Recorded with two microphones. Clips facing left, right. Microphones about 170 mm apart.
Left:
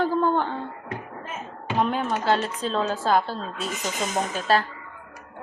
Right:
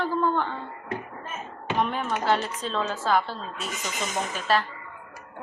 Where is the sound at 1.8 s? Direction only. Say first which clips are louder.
Left 3 dB; 30° left (ahead or behind).